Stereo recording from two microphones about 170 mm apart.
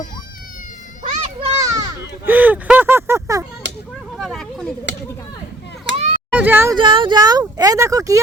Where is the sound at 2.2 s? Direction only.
10° right (ahead or behind).